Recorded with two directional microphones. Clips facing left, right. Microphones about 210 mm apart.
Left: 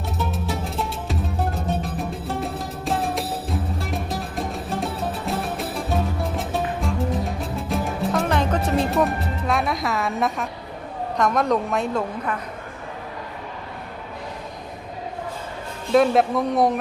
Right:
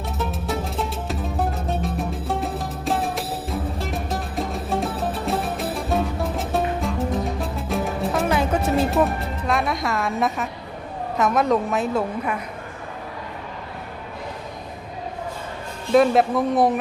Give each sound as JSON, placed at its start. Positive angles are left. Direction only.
{"t": 0.2, "sound": "music", "side_deg": 0}
{"t": 11.2, "sound": "a woman's voice", "side_deg": -5}
{"t": 15.9, "sound": "a woman's voice", "side_deg": 0}